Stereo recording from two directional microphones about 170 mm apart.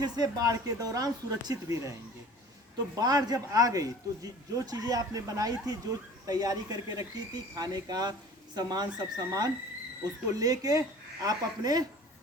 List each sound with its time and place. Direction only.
0.0 s a man's voice: 20° right (ahead or behind)